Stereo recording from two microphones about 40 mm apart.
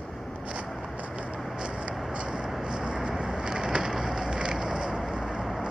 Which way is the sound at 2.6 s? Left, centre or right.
Right.